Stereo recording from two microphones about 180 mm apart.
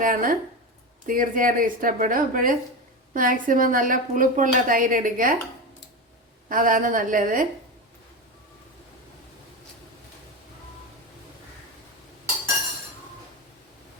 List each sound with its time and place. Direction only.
0.0 s a woman's voice: 50° right (ahead or behind)
6.5 s a woman's voice: 50° right (ahead or behind)